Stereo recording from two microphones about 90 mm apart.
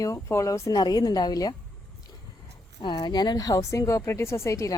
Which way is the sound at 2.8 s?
60° left (ahead or behind).